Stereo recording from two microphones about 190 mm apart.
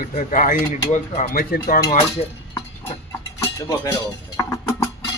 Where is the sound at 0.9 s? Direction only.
35° left (ahead or behind).